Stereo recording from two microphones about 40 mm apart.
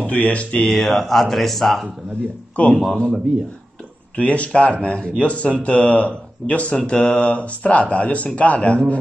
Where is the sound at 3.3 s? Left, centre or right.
Centre.